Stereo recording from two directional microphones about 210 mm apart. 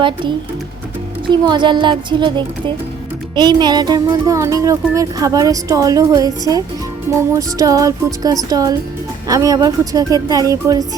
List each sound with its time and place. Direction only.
1.3 s a woman's voice: 20° right (ahead or behind)